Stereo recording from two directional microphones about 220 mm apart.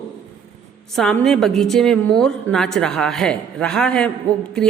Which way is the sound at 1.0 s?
Centre (ahead or behind).